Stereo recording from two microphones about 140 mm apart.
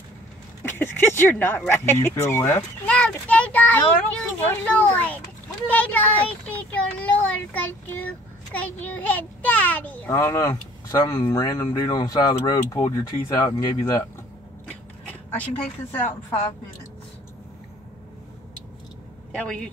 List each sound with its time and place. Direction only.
0.6 s a child's voice: 15° left (ahead or behind)
10.1 s speech: 25° left (ahead or behind)
15.0 s a sound: 10° left (ahead or behind)
19.3 s a child's voice: 10° left (ahead or behind)